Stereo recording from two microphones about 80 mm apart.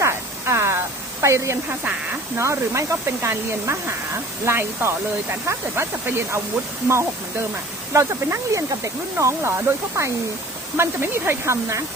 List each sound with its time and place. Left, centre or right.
0.0 s static: right
1.2 s speech: right
7.9 s speech: right